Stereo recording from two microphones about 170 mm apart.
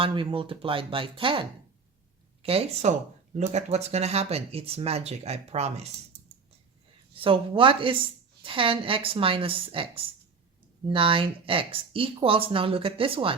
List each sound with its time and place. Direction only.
0.0 s speech: 30° right (ahead or behind)
7.2 s speech: 30° right (ahead or behind)